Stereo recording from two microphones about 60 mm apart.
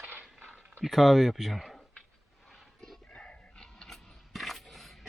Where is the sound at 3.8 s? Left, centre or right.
Centre.